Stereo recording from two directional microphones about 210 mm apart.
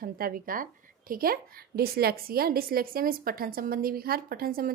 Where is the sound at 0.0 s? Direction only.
45° right (ahead or behind).